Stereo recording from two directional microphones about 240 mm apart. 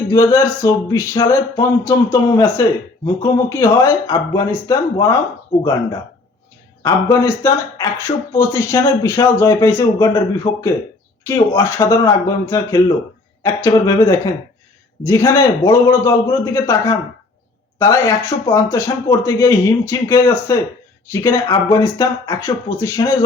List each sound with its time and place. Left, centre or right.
0.1 s speech: centre
6.8 s speech: centre
10.5 s speech: left
11.2 s speech: centre